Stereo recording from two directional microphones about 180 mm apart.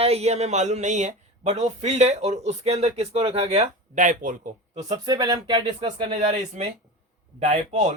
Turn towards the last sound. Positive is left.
turn(degrees=-40)  # may be behind; listen again after turning